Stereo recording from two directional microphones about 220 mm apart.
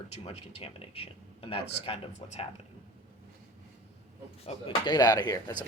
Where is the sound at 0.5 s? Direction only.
25° left (ahead or behind).